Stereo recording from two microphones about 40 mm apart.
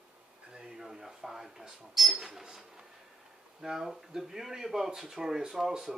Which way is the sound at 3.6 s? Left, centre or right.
Centre.